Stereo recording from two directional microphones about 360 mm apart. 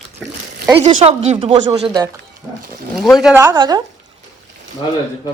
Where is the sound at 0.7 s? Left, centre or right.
Centre.